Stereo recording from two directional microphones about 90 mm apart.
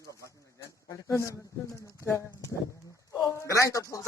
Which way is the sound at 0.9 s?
35° left (ahead or behind).